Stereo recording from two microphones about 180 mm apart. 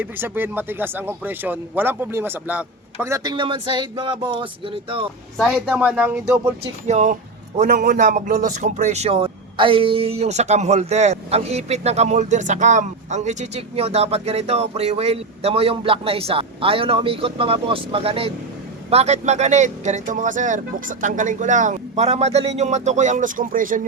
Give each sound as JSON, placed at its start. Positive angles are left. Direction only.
{"t": 0.0, "sound": "speech", "side_deg": -10}
{"t": 5.4, "sound": "speech", "side_deg": -5}
{"t": 6.8, "sound": "a man's voice", "side_deg": -40}